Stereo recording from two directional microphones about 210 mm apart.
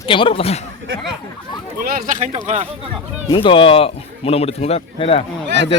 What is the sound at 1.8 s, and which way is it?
Speech, 45° right (ahead or behind).